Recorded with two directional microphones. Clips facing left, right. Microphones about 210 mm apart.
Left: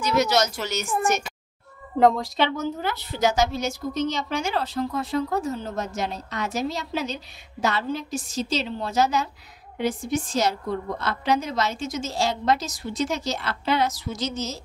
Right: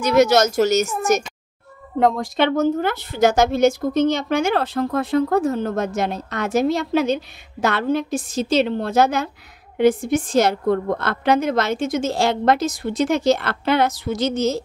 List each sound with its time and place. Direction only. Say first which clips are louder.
0.0 s speech: right 7 dB; 50° right (ahead or behind)
2.0 s speech: even; centre (ahead or behind)
2.2 s a woman's voice: right 7 dB; 50° right (ahead or behind)